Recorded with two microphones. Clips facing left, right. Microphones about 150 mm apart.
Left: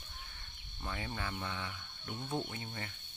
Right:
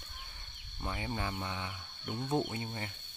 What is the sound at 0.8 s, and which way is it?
Cricket, 20° right (ahead or behind).